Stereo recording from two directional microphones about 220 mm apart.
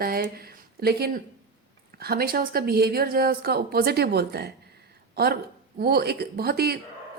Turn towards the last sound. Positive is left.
turn(degrees=-45)  # may be behind; listen again after turning